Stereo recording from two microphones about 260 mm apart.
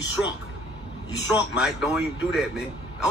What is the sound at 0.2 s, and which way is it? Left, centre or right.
Speech, centre.